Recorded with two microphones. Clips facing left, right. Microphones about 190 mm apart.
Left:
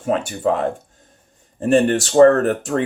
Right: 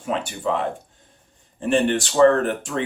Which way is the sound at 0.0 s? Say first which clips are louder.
Left 5 dB; 45° left (ahead or behind).